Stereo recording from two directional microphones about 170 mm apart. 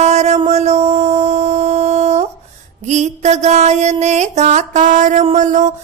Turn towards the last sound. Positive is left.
turn(degrees=-45)  # may be behind; listen again after turning